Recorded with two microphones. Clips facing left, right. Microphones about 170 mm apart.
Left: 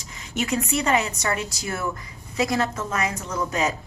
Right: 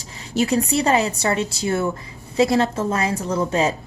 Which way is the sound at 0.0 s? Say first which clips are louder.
Right 7 dB; 30° right (ahead or behind).